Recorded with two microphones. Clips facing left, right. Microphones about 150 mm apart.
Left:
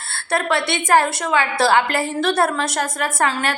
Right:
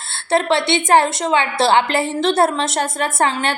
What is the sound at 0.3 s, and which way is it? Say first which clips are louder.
A woman's voice: right 4 dB; 25° right (ahead or behind).